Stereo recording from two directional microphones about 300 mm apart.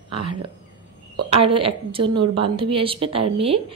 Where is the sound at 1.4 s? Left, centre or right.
Centre.